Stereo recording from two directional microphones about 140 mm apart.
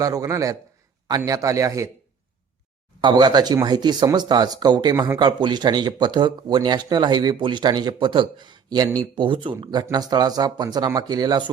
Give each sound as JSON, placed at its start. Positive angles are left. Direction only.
{"t": 0.0, "sound": "speech", "side_deg": -25}
{"t": 3.0, "sound": "speech", "side_deg": -30}
{"t": 4.9, "sound": "speech", "side_deg": -20}
{"t": 5.2, "sound": "speech", "side_deg": -30}